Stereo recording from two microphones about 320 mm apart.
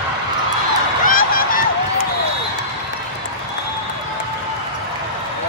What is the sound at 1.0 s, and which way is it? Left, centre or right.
Honk, left.